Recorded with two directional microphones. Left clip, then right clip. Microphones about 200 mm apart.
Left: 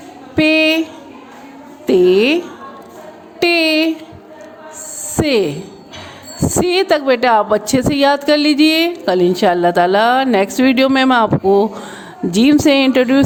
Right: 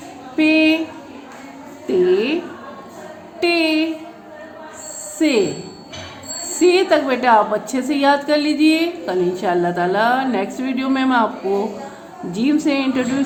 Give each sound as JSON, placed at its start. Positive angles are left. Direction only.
{"t": 0.3, "sound": "a sound", "side_deg": 50}
{"t": 1.9, "sound": "a woman's voice", "side_deg": 50}
{"t": 3.4, "sound": "a sound", "side_deg": 50}
{"t": 5.2, "sound": "speech", "side_deg": 50}
{"t": 6.6, "sound": "a woman's voice", "side_deg": 50}
{"t": 12.3, "sound": "a woman's voice", "side_deg": 50}